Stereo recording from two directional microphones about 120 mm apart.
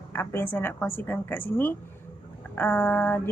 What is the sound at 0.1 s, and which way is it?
A woman's voice, 20° left (ahead or behind).